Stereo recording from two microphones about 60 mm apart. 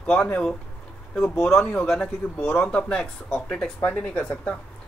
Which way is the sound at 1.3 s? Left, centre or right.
Centre.